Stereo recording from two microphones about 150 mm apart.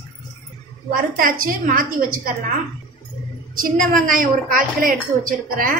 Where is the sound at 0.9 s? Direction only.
70° right (ahead or behind).